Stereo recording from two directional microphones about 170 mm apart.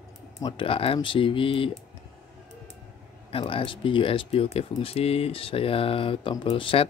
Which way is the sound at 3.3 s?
35° left (ahead or behind).